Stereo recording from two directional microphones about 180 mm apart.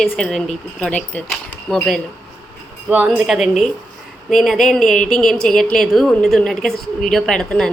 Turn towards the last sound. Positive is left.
turn(degrees=5)  # may be behind; listen again after turning